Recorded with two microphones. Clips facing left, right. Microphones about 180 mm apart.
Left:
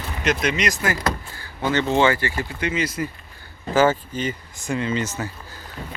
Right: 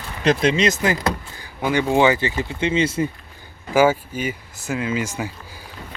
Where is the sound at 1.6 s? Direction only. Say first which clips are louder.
Right 2 dB; 10° right (ahead or behind); by 3.1 s 25° right (ahead or behind).